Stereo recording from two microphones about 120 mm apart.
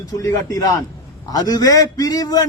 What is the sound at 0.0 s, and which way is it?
A man's voice, 30° left (ahead or behind).